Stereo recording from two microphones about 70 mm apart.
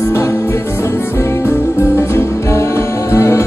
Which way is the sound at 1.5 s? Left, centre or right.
Left.